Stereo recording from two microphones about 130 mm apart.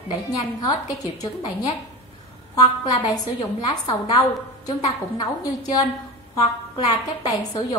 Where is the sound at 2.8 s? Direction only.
30° left (ahead or behind).